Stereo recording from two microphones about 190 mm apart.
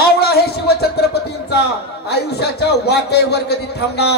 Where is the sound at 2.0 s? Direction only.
60° left (ahead or behind).